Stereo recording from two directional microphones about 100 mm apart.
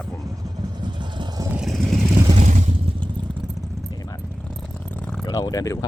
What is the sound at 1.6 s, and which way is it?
Vehicle, centre (ahead or behind).